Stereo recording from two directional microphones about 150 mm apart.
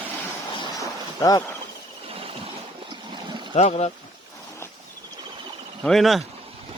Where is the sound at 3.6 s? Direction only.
45° left (ahead or behind).